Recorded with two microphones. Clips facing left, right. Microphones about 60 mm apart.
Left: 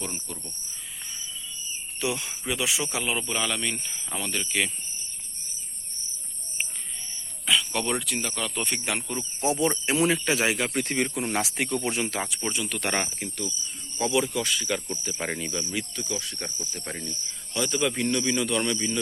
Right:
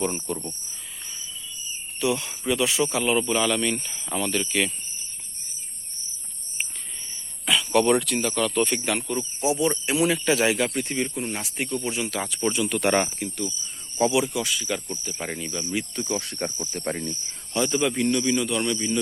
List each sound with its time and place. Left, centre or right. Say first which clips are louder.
2.0 s speech: right 5 dB; left
7.4 s speech: right 6 dB; centre
9.4 s speech: right 1 dB; left
10.8 s speech: even; left
11.3 s speech: left 2 dB; left
12.0 s speech: right 1 dB; left
12.4 s speech: right 6 dB; centre
15.7 s speech: right 4 dB; right
17.9 s speech: right 3 dB; centre